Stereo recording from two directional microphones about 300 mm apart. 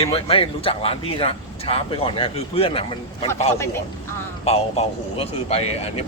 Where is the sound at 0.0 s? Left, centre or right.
Centre.